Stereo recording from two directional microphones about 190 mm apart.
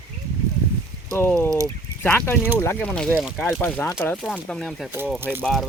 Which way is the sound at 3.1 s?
5° right (ahead or behind).